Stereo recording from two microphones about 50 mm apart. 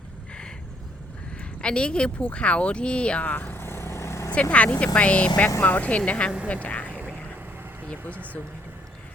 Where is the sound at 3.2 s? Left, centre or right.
Left.